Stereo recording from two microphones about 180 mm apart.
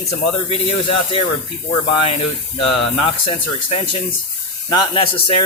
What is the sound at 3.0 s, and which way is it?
Speech, 30° left (ahead or behind).